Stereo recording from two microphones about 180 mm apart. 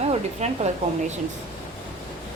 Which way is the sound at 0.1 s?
40° right (ahead or behind).